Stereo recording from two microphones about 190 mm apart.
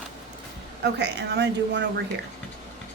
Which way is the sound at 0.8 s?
60° right (ahead or behind).